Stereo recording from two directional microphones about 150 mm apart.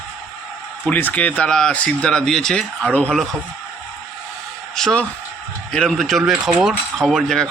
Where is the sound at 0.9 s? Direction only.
10° left (ahead or behind).